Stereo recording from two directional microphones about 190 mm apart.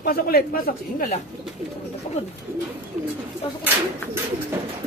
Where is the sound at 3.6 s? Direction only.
10° right (ahead or behind).